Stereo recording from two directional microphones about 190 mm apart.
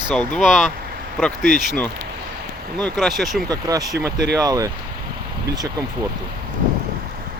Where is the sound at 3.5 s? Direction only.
20° right (ahead or behind).